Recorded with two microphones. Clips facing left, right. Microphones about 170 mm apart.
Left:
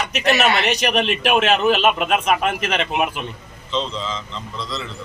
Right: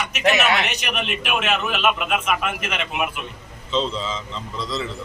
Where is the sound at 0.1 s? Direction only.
35° left (ahead or behind).